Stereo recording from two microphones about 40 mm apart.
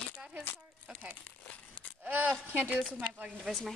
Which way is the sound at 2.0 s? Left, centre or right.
Right.